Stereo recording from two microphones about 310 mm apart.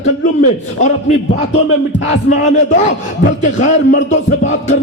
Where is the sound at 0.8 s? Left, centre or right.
Left.